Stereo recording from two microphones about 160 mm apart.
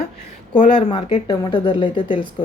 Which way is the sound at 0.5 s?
50° left (ahead or behind).